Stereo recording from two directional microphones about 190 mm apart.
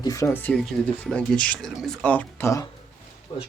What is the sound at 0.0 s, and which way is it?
Speech, 15° left (ahead or behind).